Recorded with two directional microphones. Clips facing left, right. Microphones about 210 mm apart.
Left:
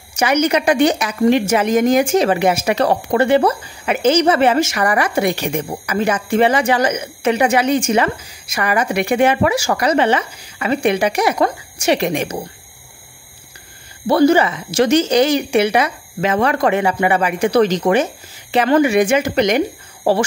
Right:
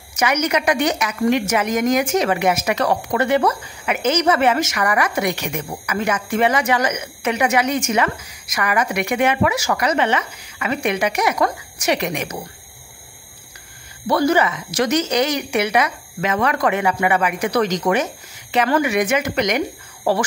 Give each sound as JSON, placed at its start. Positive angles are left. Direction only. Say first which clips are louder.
{"t": 0.1, "sound": "a woman's voice", "louder": "left 4 dB", "side_deg": 30}
{"t": 14.0, "sound": "speech", "louder": "left 5 dB", "side_deg": 30}